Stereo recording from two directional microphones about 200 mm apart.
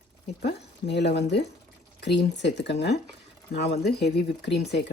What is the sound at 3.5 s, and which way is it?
Speech, 55° left (ahead or behind).